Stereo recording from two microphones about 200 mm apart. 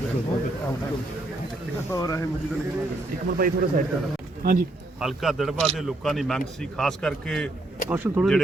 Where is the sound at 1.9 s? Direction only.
15° left (ahead or behind).